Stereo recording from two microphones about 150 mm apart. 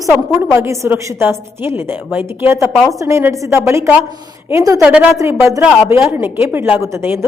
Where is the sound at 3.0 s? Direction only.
20° right (ahead or behind).